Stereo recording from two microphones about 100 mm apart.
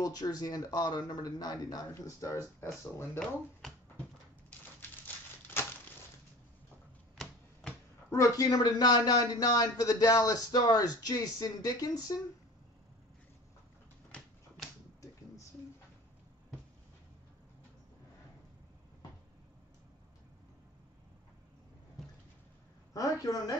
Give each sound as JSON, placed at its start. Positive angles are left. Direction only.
{"t": 0.0, "sound": "speech", "side_deg": 40}
{"t": 5.0, "sound": "typewriter", "side_deg": 20}
{"t": 8.1, "sound": "speech", "side_deg": 35}
{"t": 22.9, "sound": "speech", "side_deg": 35}